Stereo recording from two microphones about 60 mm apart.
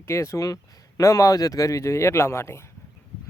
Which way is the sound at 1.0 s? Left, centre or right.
Left.